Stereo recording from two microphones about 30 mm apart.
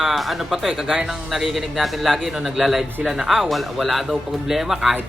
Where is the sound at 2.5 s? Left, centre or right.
Centre.